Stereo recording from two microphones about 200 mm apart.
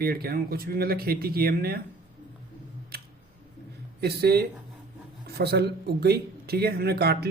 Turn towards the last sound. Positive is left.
turn(degrees=-50)  # may be behind; listen again after turning